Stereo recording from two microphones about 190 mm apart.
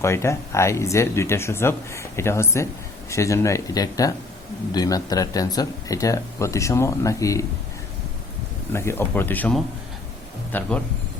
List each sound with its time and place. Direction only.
0.0 s speech: 15° left (ahead or behind)
8.7 s speech: 15° left (ahead or behind)